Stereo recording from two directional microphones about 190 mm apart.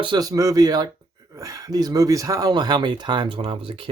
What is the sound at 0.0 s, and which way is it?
Speech, 20° right (ahead or behind).